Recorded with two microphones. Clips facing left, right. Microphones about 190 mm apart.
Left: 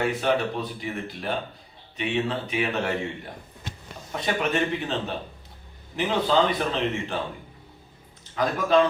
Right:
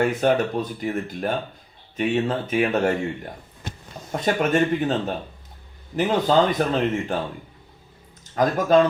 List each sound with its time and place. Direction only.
0.1 s speech: 45° right (ahead or behind)
8.4 s speech: 45° right (ahead or behind)